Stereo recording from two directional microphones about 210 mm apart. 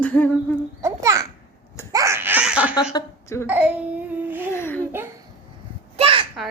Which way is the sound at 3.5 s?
5° right (ahead or behind).